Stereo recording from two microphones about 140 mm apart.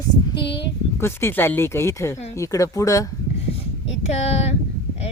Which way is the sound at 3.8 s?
50° left (ahead or behind).